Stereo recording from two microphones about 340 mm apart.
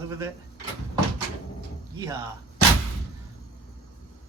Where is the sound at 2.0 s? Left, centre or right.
Centre.